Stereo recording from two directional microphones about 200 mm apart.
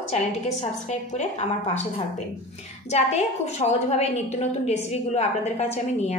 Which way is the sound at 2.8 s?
35° left (ahead or behind).